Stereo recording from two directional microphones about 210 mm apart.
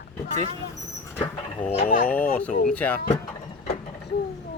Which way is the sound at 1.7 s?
30° left (ahead or behind).